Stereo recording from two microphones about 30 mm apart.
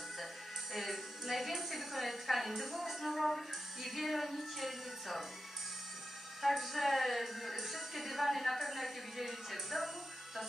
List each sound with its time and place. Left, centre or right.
0.7 s a woman's voice: centre
6.4 s speech: centre